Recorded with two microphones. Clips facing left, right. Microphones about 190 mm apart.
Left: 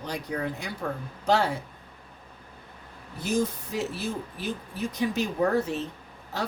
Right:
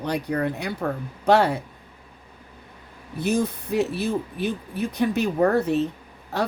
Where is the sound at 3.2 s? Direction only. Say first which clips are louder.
Right 3 dB; 60° right (ahead or behind).